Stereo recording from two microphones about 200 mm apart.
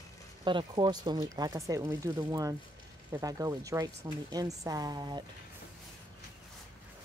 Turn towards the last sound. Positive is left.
turn(degrees=-20)  # may be behind; listen again after turning